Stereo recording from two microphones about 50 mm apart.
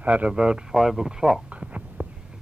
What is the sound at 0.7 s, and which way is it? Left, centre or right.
Speech, centre.